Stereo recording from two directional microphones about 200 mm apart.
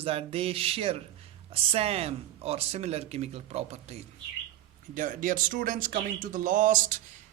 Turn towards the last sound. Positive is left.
turn(degrees=-40)  # may be behind; listen again after turning